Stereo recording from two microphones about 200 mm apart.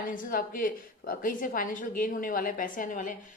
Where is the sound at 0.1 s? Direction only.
45° left (ahead or behind).